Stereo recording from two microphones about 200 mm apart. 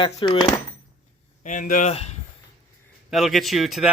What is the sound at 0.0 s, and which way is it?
Speech, 25° left (ahead or behind).